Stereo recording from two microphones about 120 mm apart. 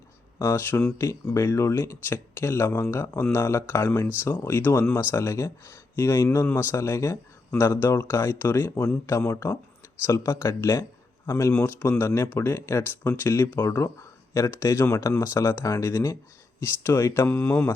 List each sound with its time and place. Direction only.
0.3 s speech: 20° left (ahead or behind)